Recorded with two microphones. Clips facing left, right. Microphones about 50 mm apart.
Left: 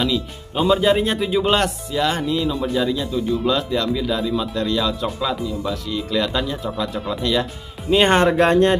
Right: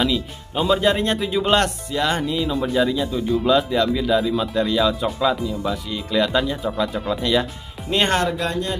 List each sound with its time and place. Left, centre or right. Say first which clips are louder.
0.0 s speech: even; centre
8.1 s speech: left 5 dB; left
8.4 s speech: left 9 dB; left